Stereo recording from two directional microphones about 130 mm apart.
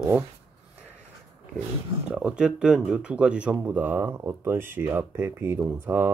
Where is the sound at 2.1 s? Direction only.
10° right (ahead or behind).